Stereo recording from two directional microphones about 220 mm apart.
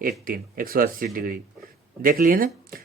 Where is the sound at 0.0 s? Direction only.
40° right (ahead or behind).